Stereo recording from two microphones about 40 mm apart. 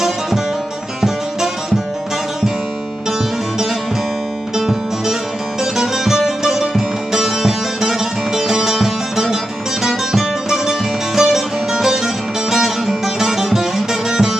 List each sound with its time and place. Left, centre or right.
1.0 s music: centre
4.5 s music: centre